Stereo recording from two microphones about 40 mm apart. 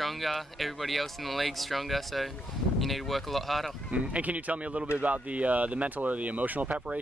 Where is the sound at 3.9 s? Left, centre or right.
Right.